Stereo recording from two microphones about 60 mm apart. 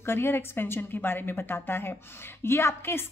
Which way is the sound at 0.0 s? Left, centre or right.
Left.